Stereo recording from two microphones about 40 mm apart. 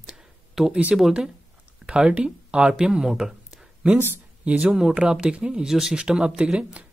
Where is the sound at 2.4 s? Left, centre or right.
Right.